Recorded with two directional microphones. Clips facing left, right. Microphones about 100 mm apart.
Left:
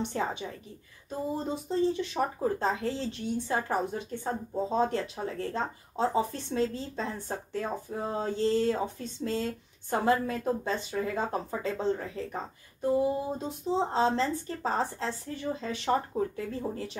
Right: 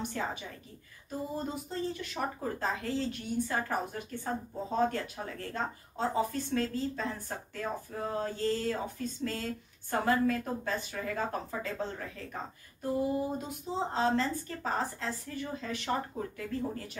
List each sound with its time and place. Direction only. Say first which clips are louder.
0.0 s speech: left 4 dB; 25° left (ahead or behind)
13.7 s speech: left 3 dB; 30° left (ahead or behind)